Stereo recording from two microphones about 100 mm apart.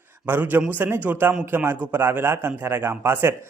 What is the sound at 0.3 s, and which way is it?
Speech, 20° right (ahead or behind).